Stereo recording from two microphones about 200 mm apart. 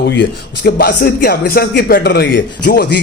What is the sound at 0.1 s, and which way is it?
Speech, 60° left (ahead or behind).